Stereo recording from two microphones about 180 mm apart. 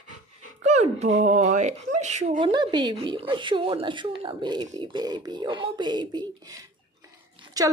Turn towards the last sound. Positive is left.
turn(degrees=-20)  # may be behind; listen again after turning